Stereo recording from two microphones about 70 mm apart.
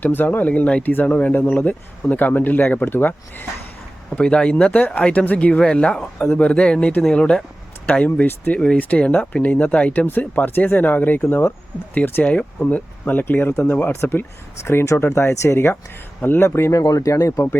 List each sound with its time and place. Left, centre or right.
0.0 s speech: left
4.1 s speech: centre; by 16.5 s left
16.5 s speech: left
16.8 s speech: left